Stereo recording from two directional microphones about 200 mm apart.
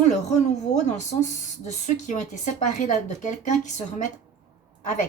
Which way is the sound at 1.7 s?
35° left (ahead or behind).